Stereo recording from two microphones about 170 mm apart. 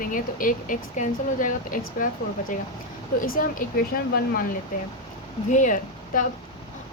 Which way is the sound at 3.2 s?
55° left (ahead or behind).